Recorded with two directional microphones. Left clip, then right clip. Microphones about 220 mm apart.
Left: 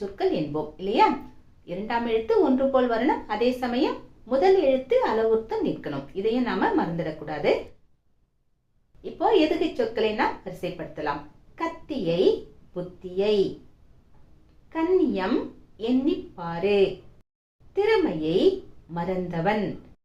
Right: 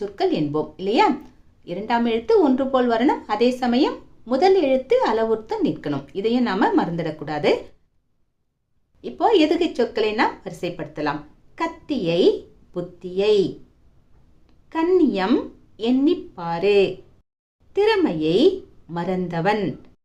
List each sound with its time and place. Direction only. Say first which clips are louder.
0.2 s a woman's voice: right 4 dB; 50° right (ahead or behind)
9.0 s a woman's voice: right 4 dB; 50° right (ahead or behind)
14.7 s a woman's voice: right 4 dB; 50° right (ahead or behind)